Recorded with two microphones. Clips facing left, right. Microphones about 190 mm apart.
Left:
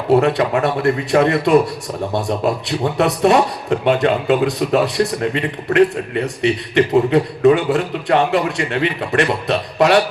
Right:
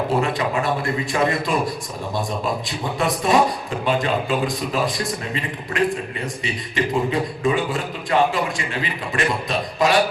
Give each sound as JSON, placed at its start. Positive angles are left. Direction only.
{"t": 0.1, "sound": "a man's voice", "side_deg": 65}